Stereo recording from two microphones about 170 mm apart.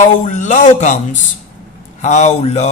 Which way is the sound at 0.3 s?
45° left (ahead or behind).